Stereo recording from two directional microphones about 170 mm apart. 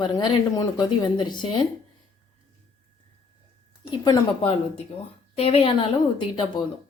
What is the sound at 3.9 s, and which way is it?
A woman's voice, 25° left (ahead or behind).